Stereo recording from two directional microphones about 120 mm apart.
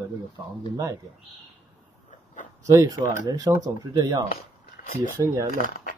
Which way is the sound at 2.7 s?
30° right (ahead or behind).